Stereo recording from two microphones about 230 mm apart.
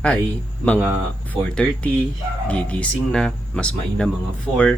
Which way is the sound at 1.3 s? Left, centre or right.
Centre.